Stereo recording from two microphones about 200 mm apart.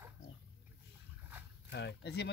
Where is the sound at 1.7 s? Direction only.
55° left (ahead or behind).